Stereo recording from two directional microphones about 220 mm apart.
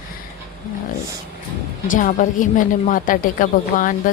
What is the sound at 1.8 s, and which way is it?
A woman's voice, 35° left (ahead or behind).